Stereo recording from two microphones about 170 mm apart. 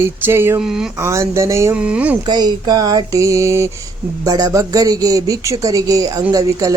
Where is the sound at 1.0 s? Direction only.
15° right (ahead or behind).